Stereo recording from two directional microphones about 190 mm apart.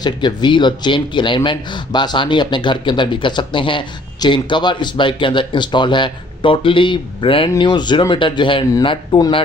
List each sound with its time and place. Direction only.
0.0 s speech: 20° left (ahead or behind)